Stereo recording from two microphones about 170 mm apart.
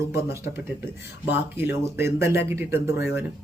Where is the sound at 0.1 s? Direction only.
15° right (ahead or behind).